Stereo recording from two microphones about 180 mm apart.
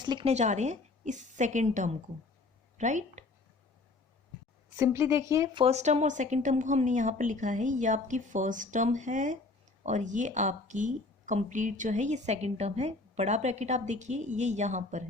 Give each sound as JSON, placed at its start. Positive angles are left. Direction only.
{"t": 0.0, "sound": "a sound", "side_deg": -25}
{"t": 0.3, "sound": "speech", "side_deg": -40}
{"t": 4.8, "sound": "speech", "side_deg": -15}
{"t": 5.6, "sound": "speech", "side_deg": -40}